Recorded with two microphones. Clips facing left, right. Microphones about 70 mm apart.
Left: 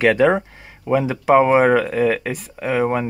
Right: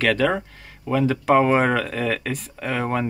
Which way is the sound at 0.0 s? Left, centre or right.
Centre.